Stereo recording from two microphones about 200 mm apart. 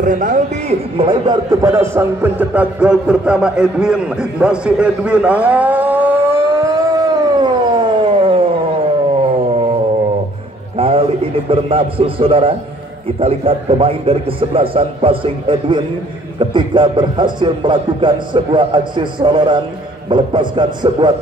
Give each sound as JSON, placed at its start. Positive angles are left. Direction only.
{"t": 0.0, "sound": "a man's voice", "side_deg": -40}
{"t": 0.9, "sound": "a man's voice", "side_deg": -25}
{"t": 10.8, "sound": "a man's voice", "side_deg": -25}